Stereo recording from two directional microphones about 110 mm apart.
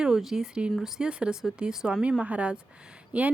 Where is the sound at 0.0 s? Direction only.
5° right (ahead or behind).